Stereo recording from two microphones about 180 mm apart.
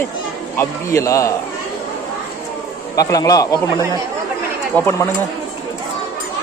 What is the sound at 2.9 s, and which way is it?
Speech, 20° left (ahead or behind).